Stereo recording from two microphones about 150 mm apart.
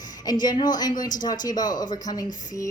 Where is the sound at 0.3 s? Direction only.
30° left (ahead or behind).